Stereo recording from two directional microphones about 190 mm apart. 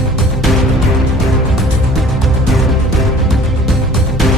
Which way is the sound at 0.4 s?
Centre (ahead or behind).